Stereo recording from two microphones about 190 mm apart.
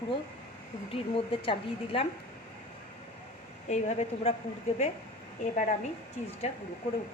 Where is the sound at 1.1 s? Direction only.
30° left (ahead or behind).